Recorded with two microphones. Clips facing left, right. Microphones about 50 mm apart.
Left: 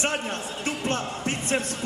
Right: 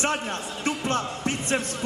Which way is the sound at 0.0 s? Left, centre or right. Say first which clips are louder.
Right 1 dB; right.